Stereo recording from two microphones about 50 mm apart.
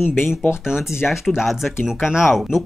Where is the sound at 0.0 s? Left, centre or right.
Left.